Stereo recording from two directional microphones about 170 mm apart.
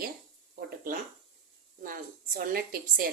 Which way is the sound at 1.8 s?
55° right (ahead or behind).